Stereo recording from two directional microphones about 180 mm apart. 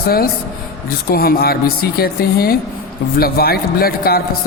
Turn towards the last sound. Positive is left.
turn(degrees=60)  # may be behind; listen again after turning